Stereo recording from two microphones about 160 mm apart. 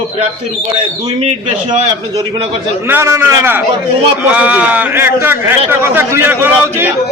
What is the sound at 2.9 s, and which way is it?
A man's voice, 15° right (ahead or behind).